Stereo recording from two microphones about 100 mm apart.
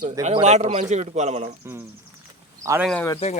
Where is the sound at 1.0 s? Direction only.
90° right.